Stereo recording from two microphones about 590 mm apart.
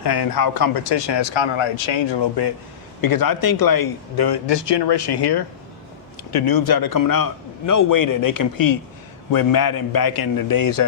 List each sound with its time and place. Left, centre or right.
0.0 s speech: left